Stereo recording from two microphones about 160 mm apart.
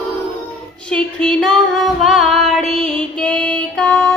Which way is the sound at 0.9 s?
5° left (ahead or behind).